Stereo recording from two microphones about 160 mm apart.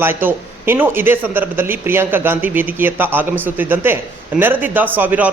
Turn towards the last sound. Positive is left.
turn(degrees=-10)  # may be behind; listen again after turning